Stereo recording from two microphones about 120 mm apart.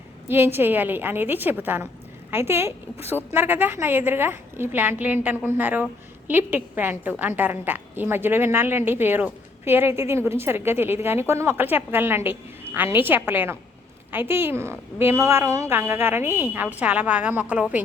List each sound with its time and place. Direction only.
0.3 s a woman's voice: 20° right (ahead or behind)